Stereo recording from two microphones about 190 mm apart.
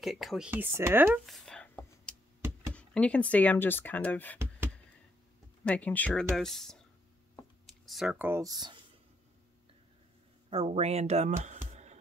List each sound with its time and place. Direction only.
0.0 s speech: centre (ahead or behind)
0.5 s speech: 10° right (ahead or behind)
1.2 s whispering: centre (ahead or behind)
2.7 s speech: 5° left (ahead or behind)
5.6 s speech: 10° left (ahead or behind); by 8.7 s 20° right (ahead or behind)
10.5 s speech: 35° right (ahead or behind)